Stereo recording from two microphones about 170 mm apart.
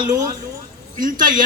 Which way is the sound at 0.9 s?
50° right (ahead or behind).